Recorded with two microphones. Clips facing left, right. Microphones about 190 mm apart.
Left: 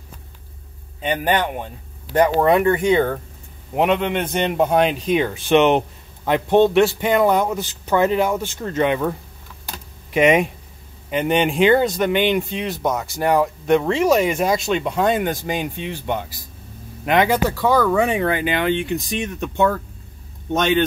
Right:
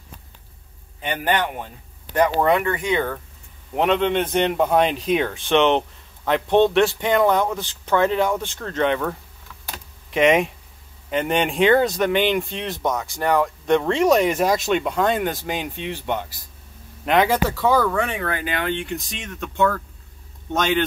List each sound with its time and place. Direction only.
1.0 s a man's voice: 20° left (ahead or behind)
2.1 s speech: 30° left (ahead or behind)
3.7 s a man's voice: 15° left (ahead or behind)
10.1 s a man's voice: 5° left (ahead or behind)
17.9 s a man's voice: 15° left (ahead or behind)